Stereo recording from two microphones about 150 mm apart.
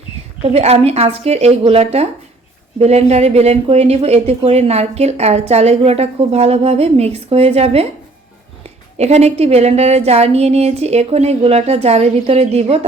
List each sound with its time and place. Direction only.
0.4 s speech: 45° right (ahead or behind)
9.0 s speech: 45° right (ahead or behind)